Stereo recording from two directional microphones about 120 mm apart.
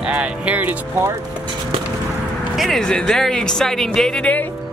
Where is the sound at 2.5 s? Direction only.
Centre (ahead or behind).